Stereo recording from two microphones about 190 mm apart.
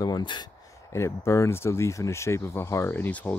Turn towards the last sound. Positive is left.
turn(degrees=10)  # may be behind; listen again after turning